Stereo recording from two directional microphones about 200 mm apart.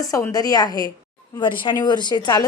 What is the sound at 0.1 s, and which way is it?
A woman's voice, 20° left (ahead or behind).